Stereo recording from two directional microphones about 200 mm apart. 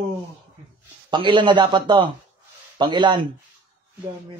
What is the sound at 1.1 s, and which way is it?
Speech, 25° right (ahead or behind).